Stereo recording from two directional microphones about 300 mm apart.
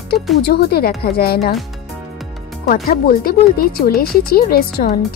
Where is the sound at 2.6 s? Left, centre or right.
Left.